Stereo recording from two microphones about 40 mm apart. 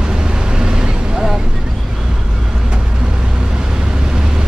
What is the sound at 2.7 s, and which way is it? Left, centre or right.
Vehicle, right.